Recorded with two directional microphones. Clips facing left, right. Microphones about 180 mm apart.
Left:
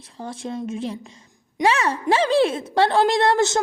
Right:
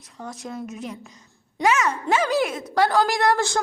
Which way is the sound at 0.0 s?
30° left (ahead or behind).